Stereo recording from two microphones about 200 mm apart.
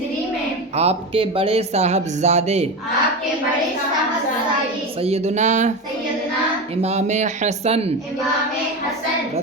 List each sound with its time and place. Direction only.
0.8 s speech: 30° right (ahead or behind)
5.0 s speech: 35° right (ahead or behind)
6.8 s speech: 35° right (ahead or behind)